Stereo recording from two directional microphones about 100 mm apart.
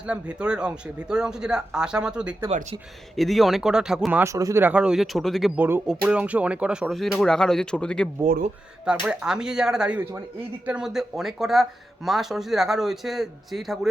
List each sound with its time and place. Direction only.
0.1 s speech: 10° right (ahead or behind)
4.1 s speech: 25° right (ahead or behind)
4.6 s speech: 10° right (ahead or behind)
5.5 s speech: 20° right (ahead or behind)
5.9 s speech: 10° right (ahead or behind)
7.0 s speech: 5° left (ahead or behind)
8.9 s speech: 10° right (ahead or behind)